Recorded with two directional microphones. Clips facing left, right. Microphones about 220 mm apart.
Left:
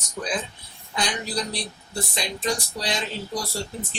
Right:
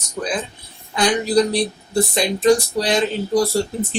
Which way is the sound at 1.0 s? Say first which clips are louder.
Right 12 dB; 60° right (ahead or behind).